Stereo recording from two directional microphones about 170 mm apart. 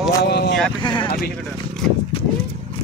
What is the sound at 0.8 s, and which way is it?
Speech, 30° left (ahead or behind).